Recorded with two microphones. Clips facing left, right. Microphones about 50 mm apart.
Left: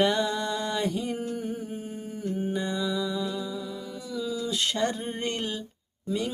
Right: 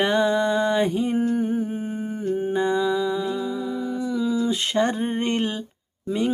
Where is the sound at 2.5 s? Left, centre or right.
Right.